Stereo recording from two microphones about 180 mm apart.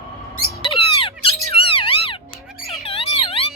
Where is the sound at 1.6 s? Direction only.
30° left (ahead or behind).